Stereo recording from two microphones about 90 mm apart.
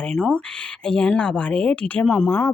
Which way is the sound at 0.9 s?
10° left (ahead or behind).